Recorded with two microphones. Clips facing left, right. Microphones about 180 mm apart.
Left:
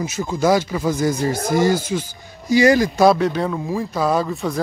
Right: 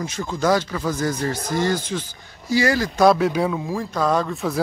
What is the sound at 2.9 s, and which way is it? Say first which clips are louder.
Speech: left 1 dB; centre (ahead or behind).